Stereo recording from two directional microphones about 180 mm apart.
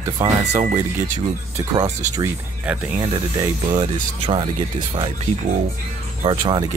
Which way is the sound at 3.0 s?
25° right (ahead or behind).